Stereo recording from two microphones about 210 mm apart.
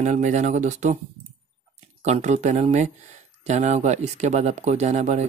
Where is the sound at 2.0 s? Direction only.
30° right (ahead or behind).